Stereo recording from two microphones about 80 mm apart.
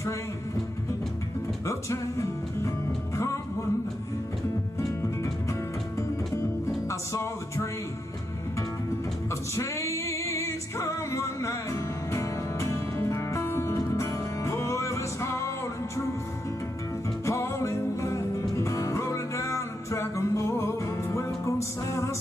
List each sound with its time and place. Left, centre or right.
1.7 s music: left
4.7 s music: left
9.6 s music: left
17.2 s music: left